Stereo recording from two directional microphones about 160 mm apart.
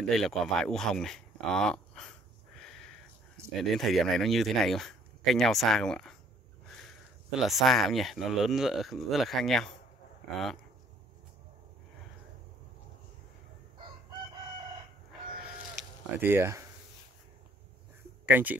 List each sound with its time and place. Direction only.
0.0 s speech: centre (ahead or behind)
3.4 s a sound: 15° right (ahead or behind)
3.7 s speech: centre (ahead or behind)
7.2 s speech: centre (ahead or behind)
16.2 s speech: 15° right (ahead or behind)
18.2 s speech: 10° right (ahead or behind)